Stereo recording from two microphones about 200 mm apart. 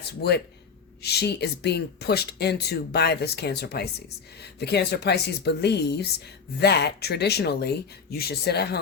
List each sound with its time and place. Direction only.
0.2 s speech: 55° left (ahead or behind)